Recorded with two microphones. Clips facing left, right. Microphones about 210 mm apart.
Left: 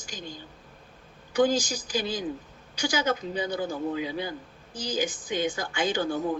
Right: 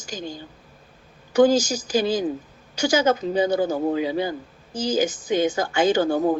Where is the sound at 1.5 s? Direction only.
20° right (ahead or behind).